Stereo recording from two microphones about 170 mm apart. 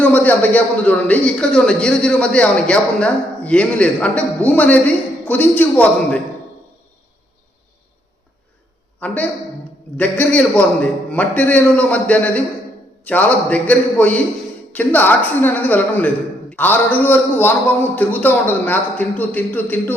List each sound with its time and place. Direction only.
0.0 s a man's voice: 10° left (ahead or behind)
9.0 s a man's voice: 10° left (ahead or behind)